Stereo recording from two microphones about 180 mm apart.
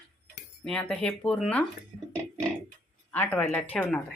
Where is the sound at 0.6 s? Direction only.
5° left (ahead or behind).